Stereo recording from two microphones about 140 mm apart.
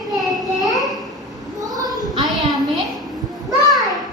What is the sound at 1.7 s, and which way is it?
Child singing, 25° right (ahead or behind).